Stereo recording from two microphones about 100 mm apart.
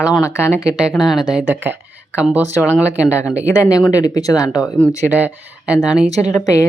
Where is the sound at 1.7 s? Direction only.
20° right (ahead or behind).